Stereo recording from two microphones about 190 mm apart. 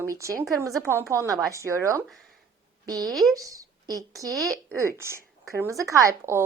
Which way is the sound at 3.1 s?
Centre (ahead or behind).